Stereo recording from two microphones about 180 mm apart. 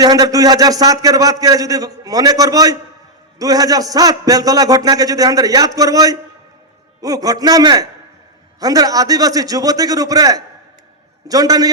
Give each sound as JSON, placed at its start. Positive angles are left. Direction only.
{"t": 0.0, "sound": "a man's voice", "side_deg": -20}